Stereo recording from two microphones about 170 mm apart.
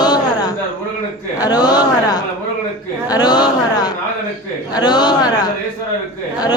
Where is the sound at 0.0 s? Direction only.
25° left (ahead or behind).